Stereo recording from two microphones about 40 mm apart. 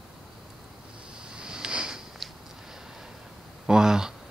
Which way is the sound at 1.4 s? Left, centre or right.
Centre.